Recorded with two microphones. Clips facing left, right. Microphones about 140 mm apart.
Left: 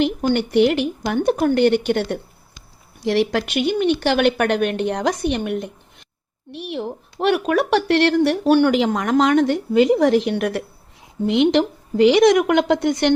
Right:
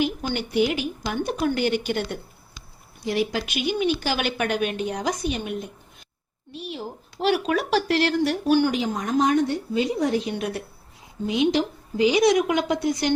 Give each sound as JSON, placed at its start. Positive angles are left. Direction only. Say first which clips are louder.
{"t": 0.0, "sound": "speech", "louder": "left 7 dB", "side_deg": 60}
{"t": 3.0, "sound": "a woman's voice", "louder": "left 6 dB", "side_deg": 75}